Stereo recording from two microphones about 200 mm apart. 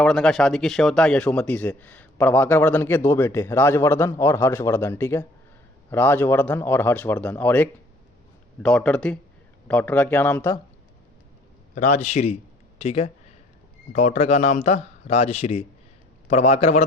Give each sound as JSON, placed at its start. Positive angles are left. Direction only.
{"t": 0.0, "sound": "a man's voice", "side_deg": 0}
{"t": 11.7, "sound": "a man's voice", "side_deg": 35}